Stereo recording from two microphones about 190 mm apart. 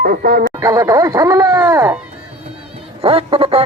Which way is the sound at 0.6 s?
15° right (ahead or behind).